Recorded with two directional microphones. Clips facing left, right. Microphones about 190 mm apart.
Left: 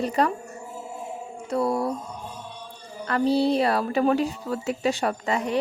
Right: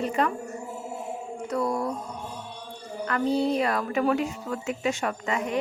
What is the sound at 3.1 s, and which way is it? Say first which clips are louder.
A woman's voice: left 3 dB; 35° left (ahead or behind).